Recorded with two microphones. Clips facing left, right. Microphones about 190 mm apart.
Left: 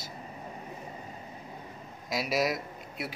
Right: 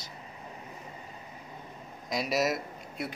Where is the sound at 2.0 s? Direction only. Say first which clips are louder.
Even; centre (ahead or behind).